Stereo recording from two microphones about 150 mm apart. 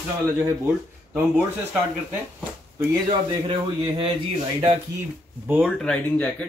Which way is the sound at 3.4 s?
35° right (ahead or behind).